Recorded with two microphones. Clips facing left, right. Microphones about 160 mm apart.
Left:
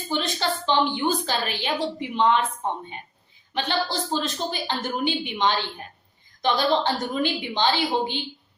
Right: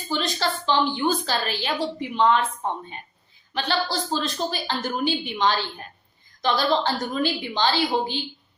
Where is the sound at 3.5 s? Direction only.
20° left (ahead or behind).